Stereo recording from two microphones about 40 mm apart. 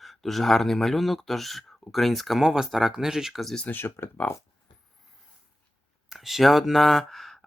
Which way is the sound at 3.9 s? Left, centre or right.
Left.